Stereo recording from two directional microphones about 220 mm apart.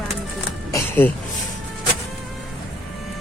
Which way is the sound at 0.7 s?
10° left (ahead or behind).